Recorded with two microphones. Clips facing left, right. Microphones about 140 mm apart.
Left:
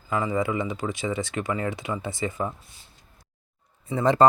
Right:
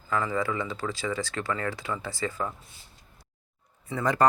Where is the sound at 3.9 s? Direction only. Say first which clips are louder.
Left 5 dB; 25° left (ahead or behind).